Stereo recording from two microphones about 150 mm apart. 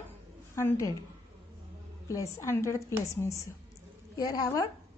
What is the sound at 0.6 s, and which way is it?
Speech, 20° left (ahead or behind).